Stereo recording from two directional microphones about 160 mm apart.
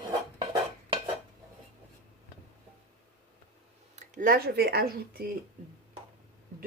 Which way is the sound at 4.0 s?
60° right (ahead or behind).